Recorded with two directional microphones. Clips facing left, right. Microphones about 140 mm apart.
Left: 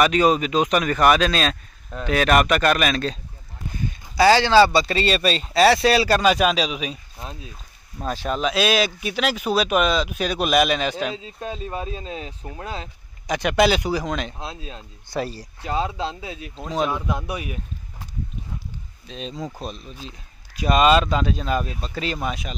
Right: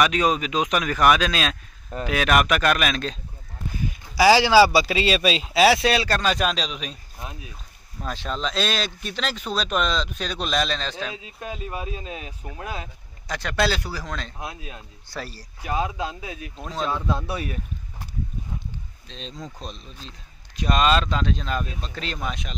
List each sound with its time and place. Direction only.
0.0 s speech: centre (ahead or behind)
4.2 s speech: 10° right (ahead or behind); by 7.2 s 5° left (ahead or behind)
7.2 s speech: 25° left (ahead or behind)
8.1 s speech: 10° left (ahead or behind)
11.1 s speech: 30° left (ahead or behind)
13.3 s speech: 15° left (ahead or behind)
19.0 s speech: 5° left (ahead or behind)